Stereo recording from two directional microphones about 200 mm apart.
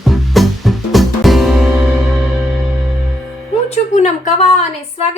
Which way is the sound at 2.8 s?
Centre (ahead or behind).